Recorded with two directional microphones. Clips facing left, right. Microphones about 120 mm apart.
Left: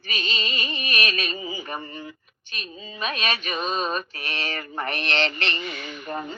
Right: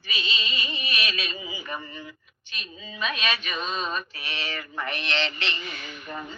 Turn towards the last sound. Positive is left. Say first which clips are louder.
# left 5 dB
turn(degrees=40)  # may be behind; listen again after turning